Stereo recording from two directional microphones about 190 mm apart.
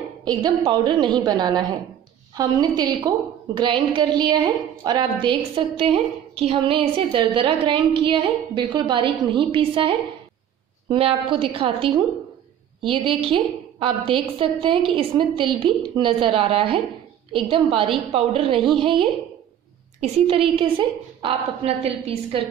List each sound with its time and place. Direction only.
0.2 s a woman's voice: 20° right (ahead or behind)